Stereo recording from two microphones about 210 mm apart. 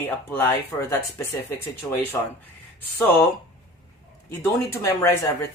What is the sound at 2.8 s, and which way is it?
Speech, 10° left (ahead or behind).